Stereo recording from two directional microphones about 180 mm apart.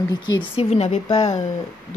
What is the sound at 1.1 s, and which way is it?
Speech, 20° left (ahead or behind).